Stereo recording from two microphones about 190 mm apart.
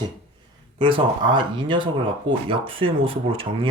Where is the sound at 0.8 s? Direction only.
25° right (ahead or behind).